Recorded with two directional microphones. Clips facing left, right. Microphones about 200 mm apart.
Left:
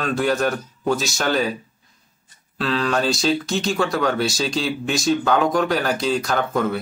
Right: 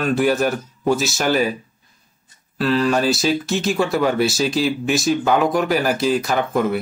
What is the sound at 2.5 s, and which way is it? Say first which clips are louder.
Speech: right 4 dB; 5° right (ahead or behind).